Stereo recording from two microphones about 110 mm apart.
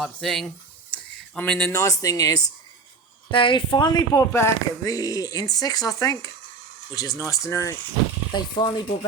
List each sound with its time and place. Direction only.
0.0 s speech: centre (ahead or behind)
1.7 s speech: 30° left (ahead or behind)
3.3 s speech: 50° left (ahead or behind)
4.3 s speech: 25° left (ahead or behind)
8.3 s speech: 45° left (ahead or behind)